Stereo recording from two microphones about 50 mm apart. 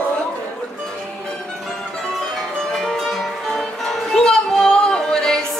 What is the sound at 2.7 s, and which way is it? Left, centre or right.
Music, centre.